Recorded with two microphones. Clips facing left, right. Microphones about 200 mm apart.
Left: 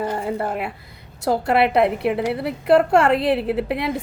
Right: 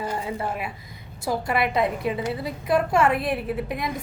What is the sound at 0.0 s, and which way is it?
A woman's voice, 55° left (ahead or behind).